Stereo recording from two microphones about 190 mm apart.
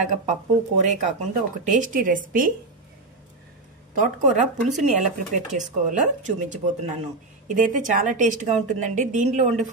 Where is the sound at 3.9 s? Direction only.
40° right (ahead or behind).